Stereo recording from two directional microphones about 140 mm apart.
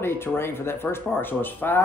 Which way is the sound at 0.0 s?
15° left (ahead or behind).